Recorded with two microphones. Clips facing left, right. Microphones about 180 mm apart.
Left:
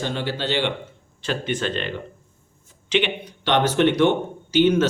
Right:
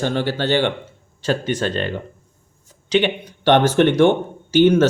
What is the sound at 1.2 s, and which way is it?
Speech, 40° right (ahead or behind).